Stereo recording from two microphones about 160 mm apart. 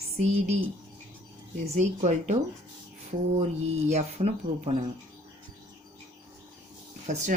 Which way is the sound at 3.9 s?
45° right (ahead or behind).